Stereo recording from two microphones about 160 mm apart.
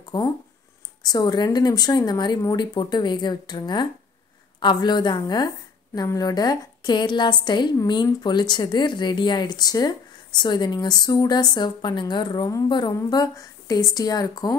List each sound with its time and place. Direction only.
0.1 s a woman's voice: 25° left (ahead or behind)